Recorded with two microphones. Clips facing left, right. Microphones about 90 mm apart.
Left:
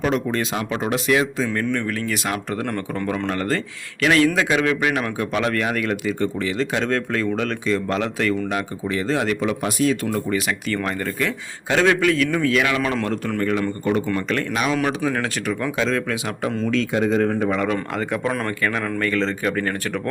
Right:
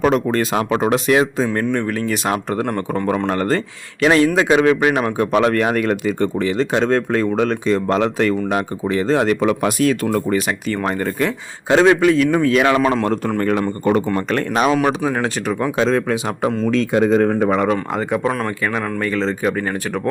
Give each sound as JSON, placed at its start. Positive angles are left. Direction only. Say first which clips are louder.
{"t": 0.0, "sound": "a man's voice", "louder": "right 5 dB", "side_deg": -50}
{"t": 6.6, "sound": "speech", "louder": "right 5 dB", "side_deg": -30}
{"t": 9.4, "sound": "speech", "louder": "right 5 dB", "side_deg": -60}
{"t": 10.7, "sound": "a man's voice", "louder": "right 5 dB", "side_deg": -30}
{"t": 12.8, "sound": "a man's voice", "louder": "right 6 dB", "side_deg": -20}
{"t": 13.1, "sound": "speech", "louder": "right 5 dB", "side_deg": -35}
{"t": 13.4, "sound": "speech", "louder": "right 2 dB", "side_deg": -50}
{"t": 14.3, "sound": "speech", "louder": "right 5 dB", "side_deg": -40}
{"t": 14.8, "sound": "a man's voice", "louder": "right 4 dB", "side_deg": -20}
{"t": 16.7, "sound": "speech", "louder": "right 4 dB", "side_deg": -45}
{"t": 17.6, "sound": "speech", "louder": "right 4 dB", "side_deg": -20}